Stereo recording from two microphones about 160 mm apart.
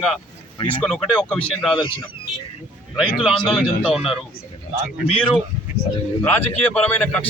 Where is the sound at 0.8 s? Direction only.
10° left (ahead or behind).